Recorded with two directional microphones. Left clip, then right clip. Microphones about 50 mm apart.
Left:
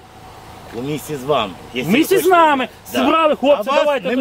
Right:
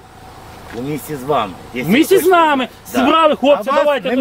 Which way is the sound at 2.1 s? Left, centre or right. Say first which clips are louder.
Even; right.